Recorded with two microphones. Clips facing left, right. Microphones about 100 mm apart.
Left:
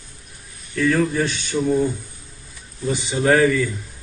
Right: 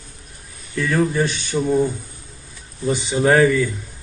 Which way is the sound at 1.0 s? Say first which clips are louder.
Right 1 dB; 20° right (ahead or behind).